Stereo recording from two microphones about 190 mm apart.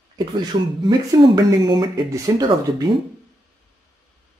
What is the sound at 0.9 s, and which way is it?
Speech, 25° right (ahead or behind).